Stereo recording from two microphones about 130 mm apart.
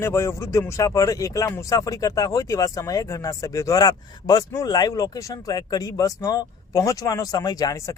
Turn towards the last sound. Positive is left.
turn(degrees=25)  # may be behind; listen again after turning